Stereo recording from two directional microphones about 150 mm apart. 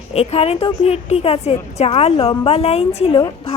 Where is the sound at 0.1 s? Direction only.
45° left (ahead or behind).